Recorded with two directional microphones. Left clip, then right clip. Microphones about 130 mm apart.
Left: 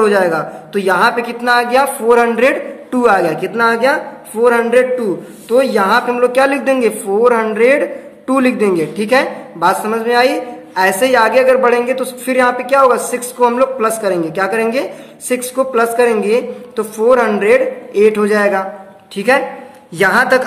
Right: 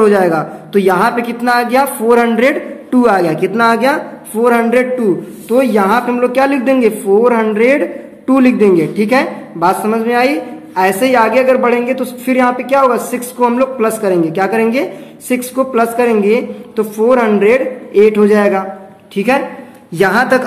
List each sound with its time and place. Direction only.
0.0 s a man's voice: 20° right (ahead or behind); by 20.4 s 5° right (ahead or behind)